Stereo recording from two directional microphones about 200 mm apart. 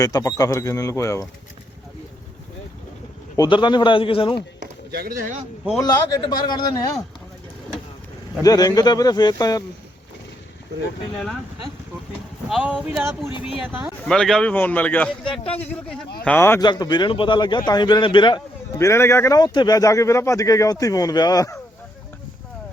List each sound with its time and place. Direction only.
0.0 s a man's voice: 15° left (ahead or behind)
3.3 s a man's voice: 20° left (ahead or behind)
4.6 s chop: 50° right (ahead or behind)
5.8 s a man's voice: 20° left (ahead or behind)
8.4 s a man's voice: 20° left (ahead or behind)
12.5 s speech: 5° right (ahead or behind)
14.0 s a man's voice: 5° left (ahead or behind)
15.2 s a man's voice: 25° left (ahead or behind)
16.2 s a man's voice: 10° left (ahead or behind)